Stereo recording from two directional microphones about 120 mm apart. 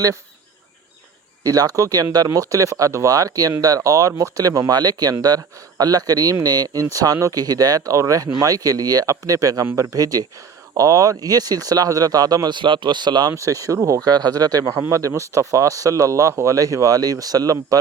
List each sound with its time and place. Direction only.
1.5 s speech: 30° right (ahead or behind)
13.3 s speech: 25° right (ahead or behind)